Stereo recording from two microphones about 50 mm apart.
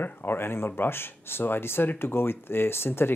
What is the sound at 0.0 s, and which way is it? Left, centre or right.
Speech, left.